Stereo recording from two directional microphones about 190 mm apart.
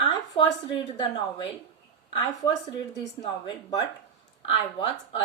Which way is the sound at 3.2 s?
25° left (ahead or behind).